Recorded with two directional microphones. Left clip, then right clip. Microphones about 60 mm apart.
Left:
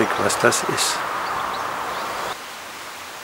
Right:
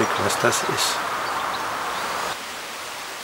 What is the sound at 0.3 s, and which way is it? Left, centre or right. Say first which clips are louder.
Speech: left 2 dB; centre.